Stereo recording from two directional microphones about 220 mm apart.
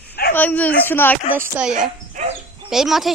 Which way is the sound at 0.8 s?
10° left (ahead or behind).